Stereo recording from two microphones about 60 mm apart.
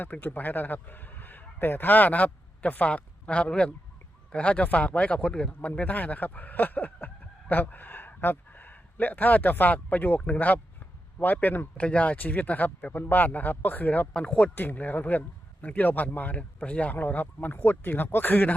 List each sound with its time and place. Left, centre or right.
0.0 s a man's voice: left
11.8 s speech: centre
14.1 s speech: centre
14.5 s speech: left